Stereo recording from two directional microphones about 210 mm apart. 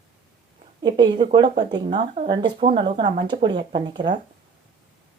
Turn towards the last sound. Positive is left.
turn(degrees=-20)  # may be behind; listen again after turning